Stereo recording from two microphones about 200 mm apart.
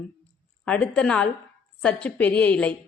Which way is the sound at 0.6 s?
5° left (ahead or behind).